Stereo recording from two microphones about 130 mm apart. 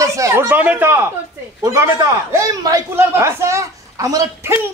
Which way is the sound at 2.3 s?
25° right (ahead or behind).